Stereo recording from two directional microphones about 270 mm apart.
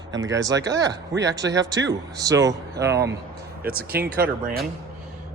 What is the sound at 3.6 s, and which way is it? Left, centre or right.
Speech, right.